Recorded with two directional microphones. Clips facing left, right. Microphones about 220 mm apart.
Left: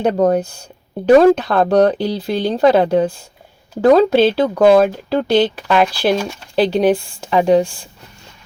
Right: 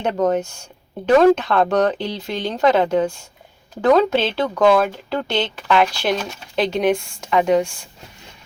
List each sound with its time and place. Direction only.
0.0 s speech: 35° left (ahead or behind)